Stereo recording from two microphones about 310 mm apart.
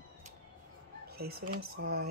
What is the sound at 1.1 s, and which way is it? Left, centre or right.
Speech, right.